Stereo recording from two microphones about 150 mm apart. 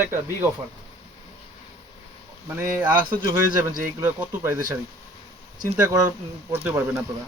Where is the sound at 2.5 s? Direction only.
15° right (ahead or behind).